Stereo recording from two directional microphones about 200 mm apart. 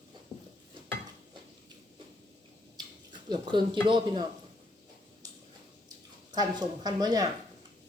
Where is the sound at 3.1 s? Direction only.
20° right (ahead or behind).